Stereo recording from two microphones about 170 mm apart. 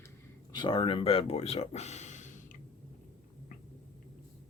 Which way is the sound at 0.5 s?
30° left (ahead or behind).